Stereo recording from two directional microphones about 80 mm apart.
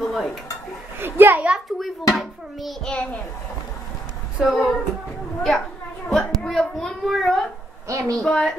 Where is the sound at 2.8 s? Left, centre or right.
Centre.